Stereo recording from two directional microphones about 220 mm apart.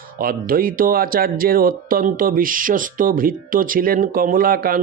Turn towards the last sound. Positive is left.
turn(degrees=-40)  # may be behind; listen again after turning